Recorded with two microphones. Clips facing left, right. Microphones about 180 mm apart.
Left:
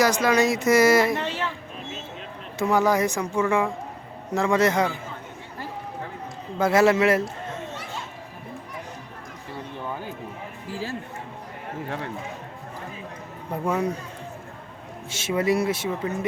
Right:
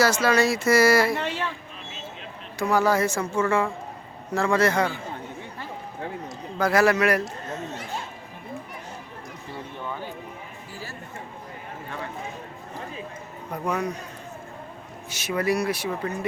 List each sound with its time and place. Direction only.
0.0 s speech: 15° left (ahead or behind)
1.2 s speech: 15° right (ahead or behind)
2.6 s speech: 20° left (ahead or behind)
6.6 s speech: 25° left (ahead or behind)
10.7 s chatter: 90° left
13.5 s speech: 25° left (ahead or behind)
15.1 s speech: 25° left (ahead or behind)